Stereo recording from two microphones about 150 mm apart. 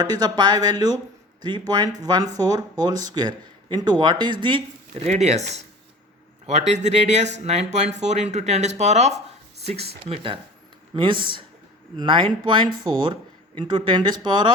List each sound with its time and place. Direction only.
0.0 s speech: 25° right (ahead or behind)
4.9 s speech: 45° right (ahead or behind); by 14.5 s 30° right (ahead or behind)